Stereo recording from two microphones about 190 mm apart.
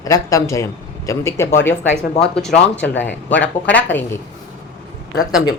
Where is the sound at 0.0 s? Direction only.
15° left (ahead or behind).